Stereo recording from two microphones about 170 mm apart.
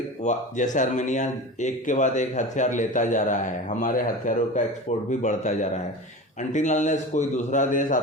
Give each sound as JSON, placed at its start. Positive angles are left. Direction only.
{"t": 0.2, "sound": "speech", "side_deg": 45}